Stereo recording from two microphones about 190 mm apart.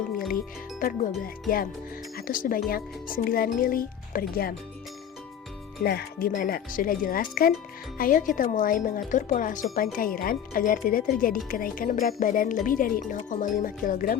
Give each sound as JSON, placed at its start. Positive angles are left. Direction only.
{"t": 0.3, "sound": "speech", "side_deg": 45}
{"t": 5.8, "sound": "speech", "side_deg": 55}